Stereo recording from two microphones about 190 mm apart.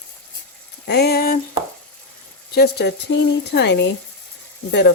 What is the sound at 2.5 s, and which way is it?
Speech, 60° left (ahead or behind).